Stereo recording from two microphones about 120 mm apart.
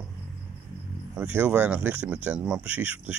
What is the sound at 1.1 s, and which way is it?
Speech, 10° right (ahead or behind).